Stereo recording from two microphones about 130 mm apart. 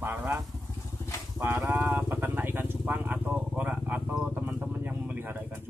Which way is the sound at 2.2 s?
15° right (ahead or behind).